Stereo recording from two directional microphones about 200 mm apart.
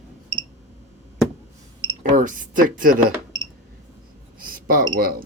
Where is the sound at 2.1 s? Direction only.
40° right (ahead or behind).